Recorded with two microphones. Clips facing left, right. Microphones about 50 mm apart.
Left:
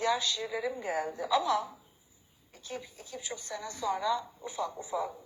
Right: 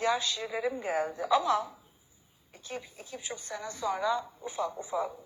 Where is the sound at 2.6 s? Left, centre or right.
Right.